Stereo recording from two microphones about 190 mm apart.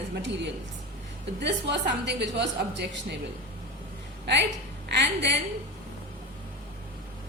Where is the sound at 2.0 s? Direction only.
65° right (ahead or behind).